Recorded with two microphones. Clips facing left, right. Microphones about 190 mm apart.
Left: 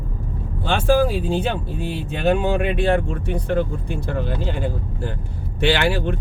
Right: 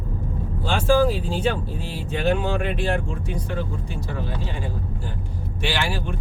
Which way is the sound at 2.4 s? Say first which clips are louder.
Left 4 dB; 60° left (ahead or behind).